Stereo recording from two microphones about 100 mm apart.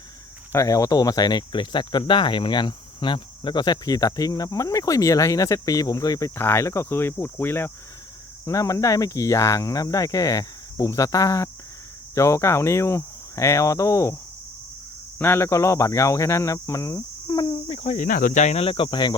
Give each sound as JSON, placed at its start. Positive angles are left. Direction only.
{"t": 0.5, "sound": "speech", "side_deg": 35}
{"t": 8.4, "sound": "speech", "side_deg": 35}
{"t": 15.2, "sound": "speech", "side_deg": 25}
{"t": 17.4, "sound": "speech", "side_deg": 65}